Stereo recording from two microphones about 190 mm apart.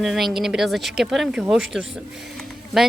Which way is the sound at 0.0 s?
Centre (ahead or behind).